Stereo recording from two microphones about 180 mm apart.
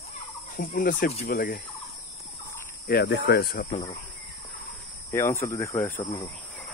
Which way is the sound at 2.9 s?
65° left (ahead or behind).